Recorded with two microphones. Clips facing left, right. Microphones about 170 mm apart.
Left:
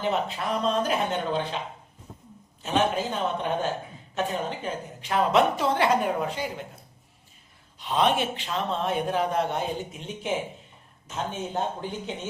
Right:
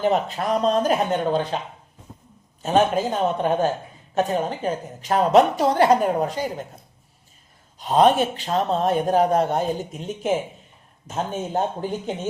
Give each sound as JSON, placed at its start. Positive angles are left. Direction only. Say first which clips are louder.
{"t": 0.0, "sound": "a woman's voice", "louder": "right 6 dB", "side_deg": -45}
{"t": 7.8, "sound": "a woman's voice", "louder": "right 7 dB", "side_deg": -40}